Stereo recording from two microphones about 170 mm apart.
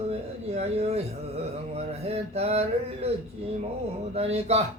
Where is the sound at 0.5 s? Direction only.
40° right (ahead or behind).